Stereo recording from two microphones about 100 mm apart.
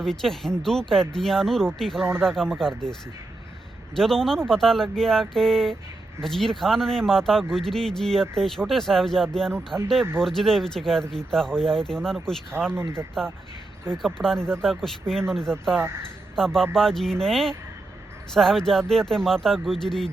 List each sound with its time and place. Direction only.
0.0 s speech: 5° left (ahead or behind)
3.9 s speech: 5° left (ahead or behind)
9.7 s speech: 25° right (ahead or behind)
10.2 s speech: 5° left (ahead or behind)
12.7 s speech: 25° right (ahead or behind)
13.9 s speech: 5° left (ahead or behind)